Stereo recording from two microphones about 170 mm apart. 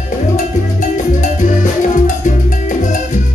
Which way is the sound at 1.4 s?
50° left (ahead or behind).